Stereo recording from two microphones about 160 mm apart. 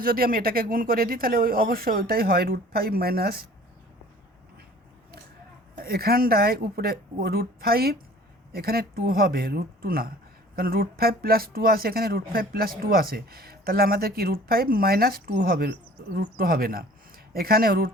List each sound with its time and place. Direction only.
0.0 s speech: 65° right (ahead or behind)
5.7 s speech: 70° right (ahead or behind)